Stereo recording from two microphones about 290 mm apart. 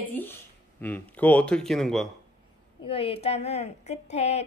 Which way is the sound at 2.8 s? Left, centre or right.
Centre.